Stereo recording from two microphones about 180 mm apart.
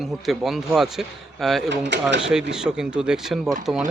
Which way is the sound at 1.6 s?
75° right (ahead or behind).